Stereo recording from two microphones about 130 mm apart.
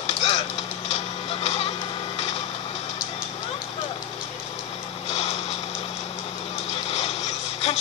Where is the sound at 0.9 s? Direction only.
60° left (ahead or behind).